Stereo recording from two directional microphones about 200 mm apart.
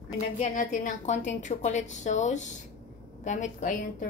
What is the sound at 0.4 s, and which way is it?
Speech, 40° left (ahead or behind).